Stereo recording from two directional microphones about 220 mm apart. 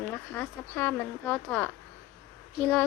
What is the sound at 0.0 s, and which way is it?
A woman's voice, 10° left (ahead or behind).